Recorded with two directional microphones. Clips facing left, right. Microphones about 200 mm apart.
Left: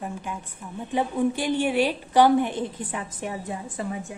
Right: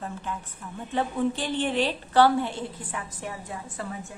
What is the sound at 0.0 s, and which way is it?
A woman's voice, 15° left (ahead or behind).